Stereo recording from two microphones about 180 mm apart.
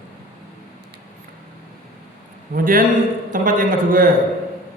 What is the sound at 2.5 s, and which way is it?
A man's voice, 50° right (ahead or behind).